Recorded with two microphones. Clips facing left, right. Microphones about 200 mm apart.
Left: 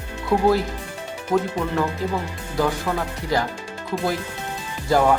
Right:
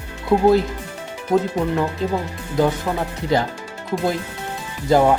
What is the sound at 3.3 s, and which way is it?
Speech, 25° right (ahead or behind).